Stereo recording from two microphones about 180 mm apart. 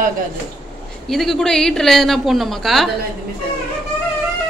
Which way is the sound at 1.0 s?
Centre (ahead or behind).